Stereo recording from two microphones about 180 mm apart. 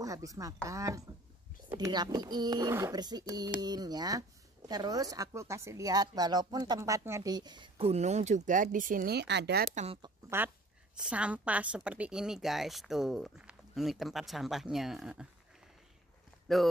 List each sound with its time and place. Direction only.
0.0 s speech: 20° right (ahead or behind); by 9.7 s 65° right (ahead or behind)
10.2 s a sound: 20° right (ahead or behind)
11.1 s speech: 5° right (ahead or behind)